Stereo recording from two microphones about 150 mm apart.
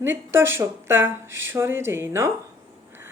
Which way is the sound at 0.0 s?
15° right (ahead or behind).